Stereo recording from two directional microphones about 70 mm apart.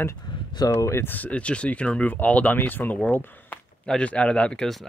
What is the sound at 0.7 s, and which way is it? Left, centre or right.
Speech, left.